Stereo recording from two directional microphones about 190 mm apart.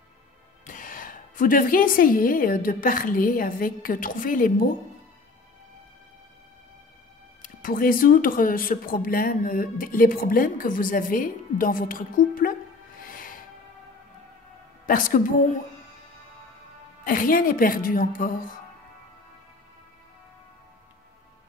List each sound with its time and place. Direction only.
0.7 s speech: 45° left (ahead or behind)
7.4 s speech: 45° left (ahead or behind)
13.0 s music: 45° left (ahead or behind)
14.9 s speech: 45° left (ahead or behind)
17.0 s speech: 45° left (ahead or behind)